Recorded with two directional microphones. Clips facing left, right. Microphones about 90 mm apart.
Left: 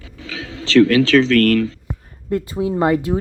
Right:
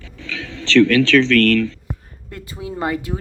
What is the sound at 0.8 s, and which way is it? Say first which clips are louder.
Speech: even; 40° left (ahead or behind).